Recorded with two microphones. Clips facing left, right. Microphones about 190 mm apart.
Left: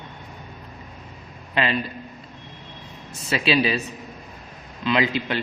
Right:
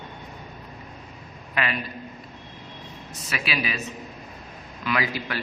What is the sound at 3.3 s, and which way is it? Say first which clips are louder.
Speech: left 8 dB; 30° left (ahead or behind).